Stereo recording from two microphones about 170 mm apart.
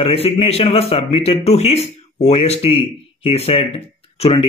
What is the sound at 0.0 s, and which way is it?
A man's voice, 35° left (ahead or behind).